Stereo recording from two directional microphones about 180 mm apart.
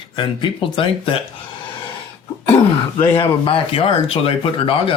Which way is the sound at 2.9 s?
30° left (ahead or behind).